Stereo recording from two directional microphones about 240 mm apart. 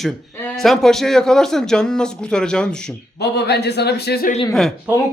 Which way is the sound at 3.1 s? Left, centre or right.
Left.